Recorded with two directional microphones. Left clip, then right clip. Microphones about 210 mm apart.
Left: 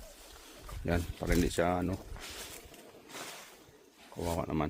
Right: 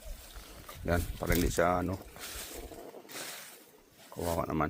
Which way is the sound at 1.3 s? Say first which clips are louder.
Right 2 dB; 15° left (ahead or behind).